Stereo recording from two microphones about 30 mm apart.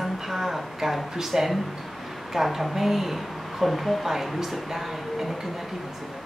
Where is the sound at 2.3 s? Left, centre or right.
Centre.